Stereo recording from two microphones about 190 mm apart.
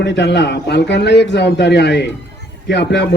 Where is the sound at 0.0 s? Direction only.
65° left (ahead or behind).